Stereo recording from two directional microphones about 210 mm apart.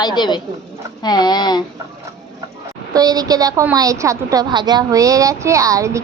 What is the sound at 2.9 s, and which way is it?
A woman's voice, 20° right (ahead or behind).